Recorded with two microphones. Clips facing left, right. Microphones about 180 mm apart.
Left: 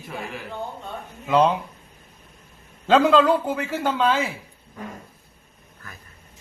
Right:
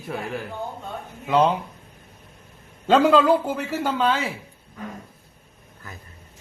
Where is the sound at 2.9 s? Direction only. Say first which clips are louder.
Even; 5° right (ahead or behind).